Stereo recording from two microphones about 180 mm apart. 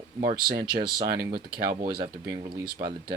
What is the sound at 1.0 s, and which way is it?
Speech, 60° right (ahead or behind).